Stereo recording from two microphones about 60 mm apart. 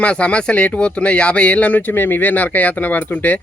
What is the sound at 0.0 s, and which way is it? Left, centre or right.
A man's voice, left.